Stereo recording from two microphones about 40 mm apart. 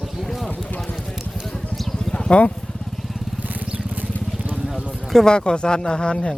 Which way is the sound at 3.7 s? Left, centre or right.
Right.